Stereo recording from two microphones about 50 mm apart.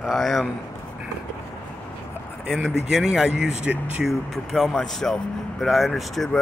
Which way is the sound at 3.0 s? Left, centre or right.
Centre.